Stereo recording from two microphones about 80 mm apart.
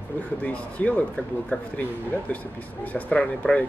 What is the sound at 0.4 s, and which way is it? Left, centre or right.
Speech, centre.